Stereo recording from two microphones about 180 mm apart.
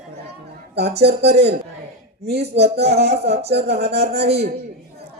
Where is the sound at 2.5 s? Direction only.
75° right (ahead or behind).